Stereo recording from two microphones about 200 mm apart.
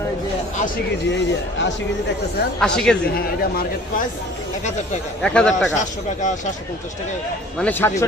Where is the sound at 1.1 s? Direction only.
65° left (ahead or behind).